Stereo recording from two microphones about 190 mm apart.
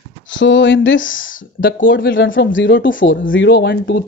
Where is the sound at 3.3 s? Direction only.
65° left (ahead or behind).